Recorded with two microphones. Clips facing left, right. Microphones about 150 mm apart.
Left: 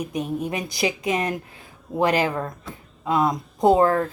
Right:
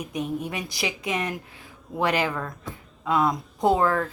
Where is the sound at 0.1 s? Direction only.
30° left (ahead or behind).